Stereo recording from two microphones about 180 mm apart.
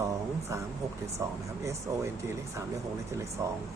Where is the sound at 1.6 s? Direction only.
15° right (ahead or behind).